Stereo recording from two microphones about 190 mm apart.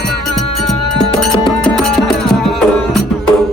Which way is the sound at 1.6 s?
5° left (ahead or behind).